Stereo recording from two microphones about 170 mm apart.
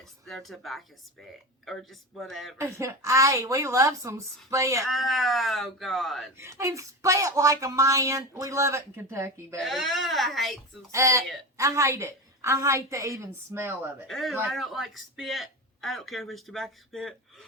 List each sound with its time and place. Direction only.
0.3 s speech: centre (ahead or behind)
2.6 s a woman's voice: 15° right (ahead or behind)
4.9 s speech: centre (ahead or behind)
6.3 s speech: 15° right (ahead or behind)
9.6 s speech: centre (ahead or behind)
10.9 s a woman's voice: 15° right (ahead or behind)
14.1 s speech: centre (ahead or behind)